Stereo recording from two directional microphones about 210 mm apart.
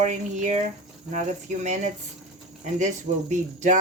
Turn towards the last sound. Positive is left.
turn(degrees=-35)  # may be behind; listen again after turning